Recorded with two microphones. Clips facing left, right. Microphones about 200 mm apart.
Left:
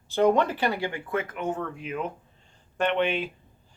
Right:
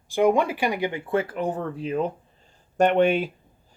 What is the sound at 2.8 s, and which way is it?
Speech, 45° right (ahead or behind).